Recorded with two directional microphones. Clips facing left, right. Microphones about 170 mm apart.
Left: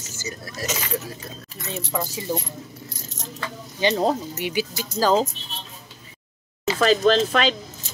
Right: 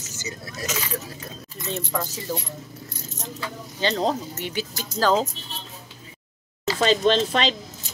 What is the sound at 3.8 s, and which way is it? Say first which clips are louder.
Speech: left 3 dB; 15° left (ahead or behind).